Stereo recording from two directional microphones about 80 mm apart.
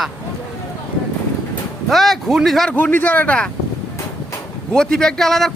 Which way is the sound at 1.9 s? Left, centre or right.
Centre.